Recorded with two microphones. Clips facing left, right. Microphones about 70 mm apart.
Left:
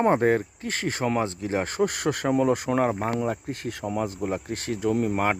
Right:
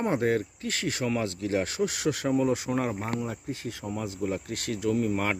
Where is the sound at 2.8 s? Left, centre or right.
Left.